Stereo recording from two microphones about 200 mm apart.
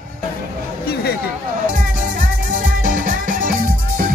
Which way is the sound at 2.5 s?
45° right (ahead or behind).